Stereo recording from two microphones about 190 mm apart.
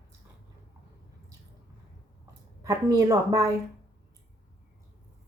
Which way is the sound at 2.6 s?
15° right (ahead or behind).